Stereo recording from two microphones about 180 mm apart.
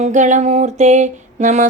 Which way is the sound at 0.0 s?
40° right (ahead or behind).